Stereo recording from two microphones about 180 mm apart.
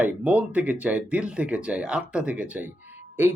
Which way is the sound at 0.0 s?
10° right (ahead or behind).